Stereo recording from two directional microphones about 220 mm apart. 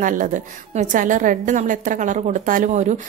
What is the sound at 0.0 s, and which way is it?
A woman's voice, 35° right (ahead or behind).